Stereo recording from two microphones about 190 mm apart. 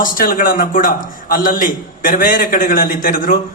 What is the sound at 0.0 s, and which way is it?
A man's voice, 45° left (ahead or behind).